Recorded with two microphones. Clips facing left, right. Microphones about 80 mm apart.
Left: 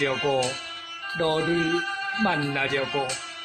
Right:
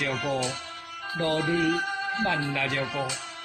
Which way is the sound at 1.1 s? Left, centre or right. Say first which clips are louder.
Left 2 dB; left.